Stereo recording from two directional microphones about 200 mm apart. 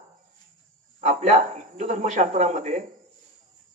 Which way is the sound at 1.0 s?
35° right (ahead or behind).